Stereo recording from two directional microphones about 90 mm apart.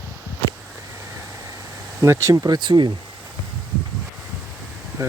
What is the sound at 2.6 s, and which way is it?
Speech, 60° right (ahead or behind).